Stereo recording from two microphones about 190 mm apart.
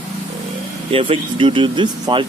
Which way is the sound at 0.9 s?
30° right (ahead or behind).